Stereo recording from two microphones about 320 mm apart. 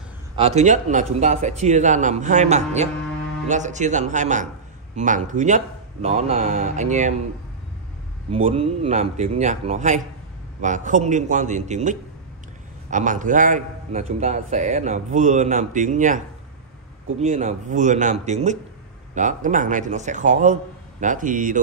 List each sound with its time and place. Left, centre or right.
0.4 s a man's voice: centre
8.3 s a man's voice: centre
17.2 s a man's voice: right